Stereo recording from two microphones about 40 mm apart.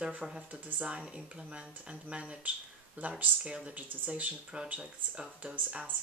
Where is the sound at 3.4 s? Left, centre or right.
Right.